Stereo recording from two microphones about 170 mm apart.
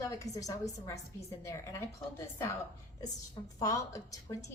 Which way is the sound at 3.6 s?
20° left (ahead or behind).